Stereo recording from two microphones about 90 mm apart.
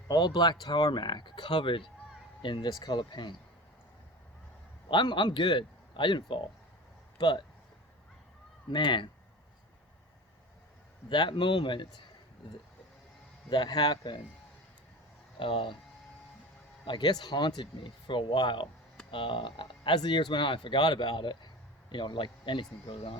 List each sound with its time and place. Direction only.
0.1 s speech: 50° left (ahead or behind)
2.6 s speech: 45° left (ahead or behind)
4.9 s speech: 60° left (ahead or behind)
8.7 s speech: 65° left (ahead or behind)
11.1 s speech: 65° left (ahead or behind)
13.5 s speech: 55° left (ahead or behind)
15.4 s speech: 75° left (ahead or behind)
16.8 s speech: 55° left (ahead or behind)